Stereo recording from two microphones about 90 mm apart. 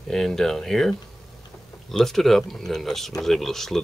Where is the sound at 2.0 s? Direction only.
5° left (ahead or behind).